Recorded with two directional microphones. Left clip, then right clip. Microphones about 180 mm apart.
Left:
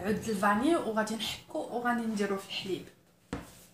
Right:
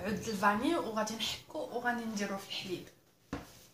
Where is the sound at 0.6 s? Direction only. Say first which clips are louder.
Left 4 dB; 20° right (ahead or behind).